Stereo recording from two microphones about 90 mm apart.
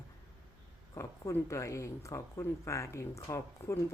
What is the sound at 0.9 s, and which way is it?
Speech, 35° left (ahead or behind).